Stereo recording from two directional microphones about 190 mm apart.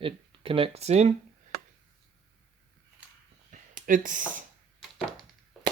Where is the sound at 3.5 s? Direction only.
45° right (ahead or behind).